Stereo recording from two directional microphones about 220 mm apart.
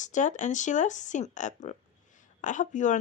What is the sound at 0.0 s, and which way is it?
Speech, 35° left (ahead or behind).